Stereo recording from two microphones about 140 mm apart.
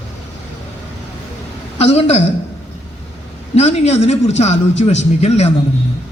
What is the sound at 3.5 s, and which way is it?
A man's voice, 50° left (ahead or behind).